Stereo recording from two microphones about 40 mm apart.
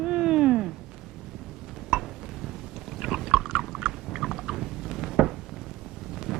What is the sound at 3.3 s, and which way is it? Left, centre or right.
Chewing, centre.